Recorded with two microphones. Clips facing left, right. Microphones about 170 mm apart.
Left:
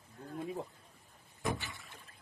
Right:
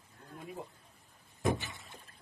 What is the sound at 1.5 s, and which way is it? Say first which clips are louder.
Rowboat: right 2 dB; 20° right (ahead or behind).